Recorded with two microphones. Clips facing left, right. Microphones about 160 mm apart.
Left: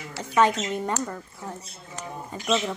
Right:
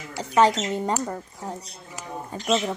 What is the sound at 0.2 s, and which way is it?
Speech, 35° right (ahead or behind).